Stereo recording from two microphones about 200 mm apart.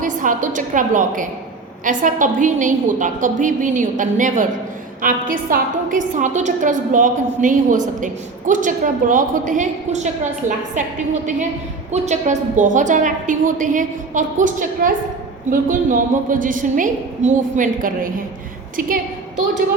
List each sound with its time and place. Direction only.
0.0 s a woman's voice: 40° right (ahead or behind)